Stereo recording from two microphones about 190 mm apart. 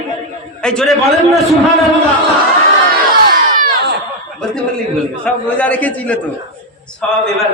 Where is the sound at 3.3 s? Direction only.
45° right (ahead or behind).